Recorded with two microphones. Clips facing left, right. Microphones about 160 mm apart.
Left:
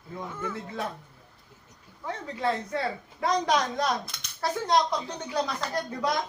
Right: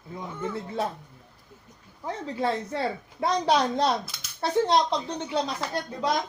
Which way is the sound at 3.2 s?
30° right (ahead or behind).